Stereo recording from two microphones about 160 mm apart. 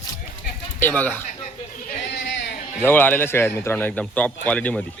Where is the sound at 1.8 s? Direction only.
75° left (ahead or behind).